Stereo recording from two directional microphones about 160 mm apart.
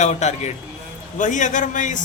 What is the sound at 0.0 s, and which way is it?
A man's voice, 45° left (ahead or behind).